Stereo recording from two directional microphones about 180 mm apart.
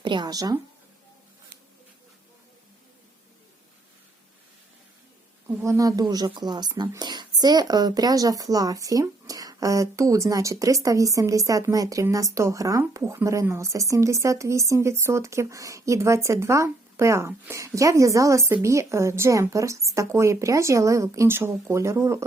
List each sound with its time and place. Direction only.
0.0 s speech: 25° right (ahead or behind)
5.5 s a woman's voice: 15° right (ahead or behind)